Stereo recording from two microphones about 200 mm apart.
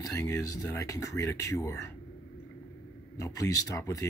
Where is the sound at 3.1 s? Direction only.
15° left (ahead or behind).